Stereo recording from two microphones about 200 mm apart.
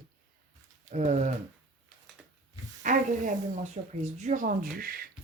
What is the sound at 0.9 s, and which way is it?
Speech, 35° right (ahead or behind).